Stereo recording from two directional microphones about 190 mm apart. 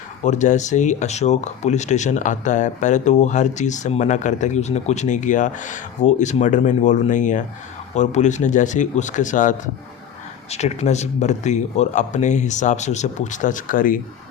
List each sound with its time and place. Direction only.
0.2 s speech: 40° left (ahead or behind)